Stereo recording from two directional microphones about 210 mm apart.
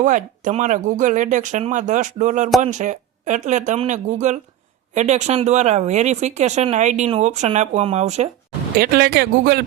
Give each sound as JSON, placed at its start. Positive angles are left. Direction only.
{"t": 0.0, "sound": "speech", "side_deg": -35}
{"t": 8.8, "sound": "speech", "side_deg": -45}